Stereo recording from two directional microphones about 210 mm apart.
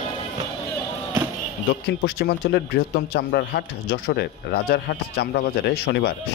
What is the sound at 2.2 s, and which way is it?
Speech, 50° left (ahead or behind).